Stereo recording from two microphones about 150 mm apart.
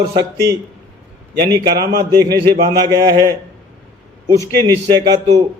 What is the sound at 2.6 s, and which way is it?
A man's voice, 30° right (ahead or behind).